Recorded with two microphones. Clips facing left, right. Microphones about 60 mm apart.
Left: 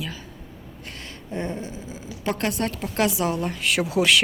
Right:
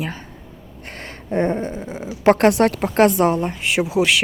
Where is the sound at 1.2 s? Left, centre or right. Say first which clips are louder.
Right 10 dB; right.